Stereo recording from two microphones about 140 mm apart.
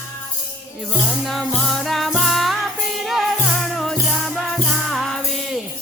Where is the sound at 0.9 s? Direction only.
Centre (ahead or behind).